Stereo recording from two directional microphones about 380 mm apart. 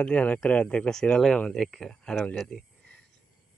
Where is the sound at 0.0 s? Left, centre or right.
Centre.